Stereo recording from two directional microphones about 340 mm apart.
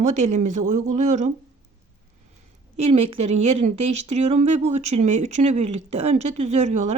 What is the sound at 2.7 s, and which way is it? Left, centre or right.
A woman's voice, centre.